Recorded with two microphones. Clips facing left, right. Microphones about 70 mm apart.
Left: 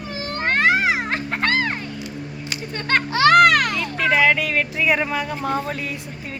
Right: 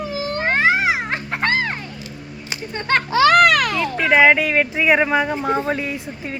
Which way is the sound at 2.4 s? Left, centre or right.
Centre.